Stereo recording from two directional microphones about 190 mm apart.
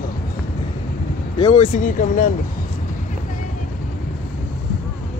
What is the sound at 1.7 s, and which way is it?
Speech, 45° left (ahead or behind).